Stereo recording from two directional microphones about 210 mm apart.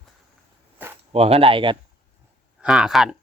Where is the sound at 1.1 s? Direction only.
30° right (ahead or behind).